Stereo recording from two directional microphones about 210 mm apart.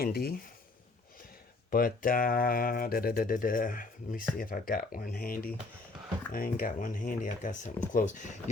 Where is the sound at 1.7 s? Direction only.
40° left (ahead or behind).